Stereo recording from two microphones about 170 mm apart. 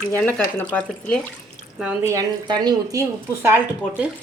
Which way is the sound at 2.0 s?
20° right (ahead or behind).